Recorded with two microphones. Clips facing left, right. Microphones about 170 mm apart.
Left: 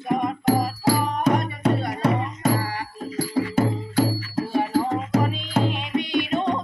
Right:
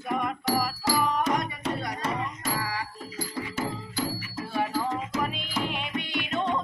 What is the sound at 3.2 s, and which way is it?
Music, 60° left (ahead or behind).